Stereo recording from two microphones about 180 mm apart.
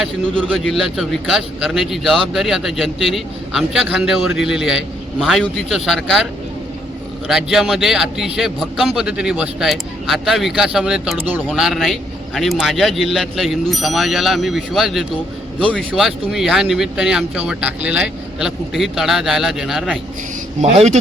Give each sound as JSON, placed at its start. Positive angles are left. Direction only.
{"t": 0.0, "sound": "speech", "side_deg": 0}
{"t": 7.3, "sound": "speech", "side_deg": 0}
{"t": 20.6, "sound": "speech", "side_deg": -40}